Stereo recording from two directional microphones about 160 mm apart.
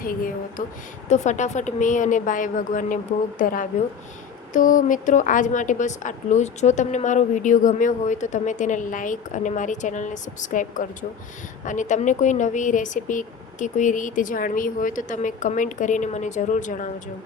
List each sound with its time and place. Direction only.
0.0 s speech: 60° left (ahead or behind)
1.0 s a woman's voice: 50° left (ahead or behind)